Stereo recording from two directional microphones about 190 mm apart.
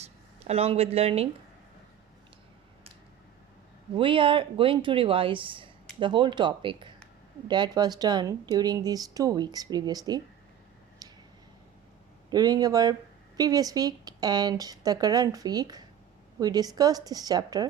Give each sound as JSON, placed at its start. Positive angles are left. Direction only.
{"t": 0.0, "sound": "speech", "side_deg": -35}
{"t": 3.9, "sound": "speech", "side_deg": -25}
{"t": 11.0, "sound": "a sound", "side_deg": -20}
{"t": 12.3, "sound": "speech", "side_deg": -20}